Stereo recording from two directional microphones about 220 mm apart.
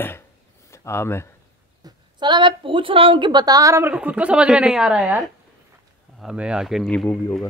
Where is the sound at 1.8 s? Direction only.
20° right (ahead or behind); by 7.4 s 5° left (ahead or behind).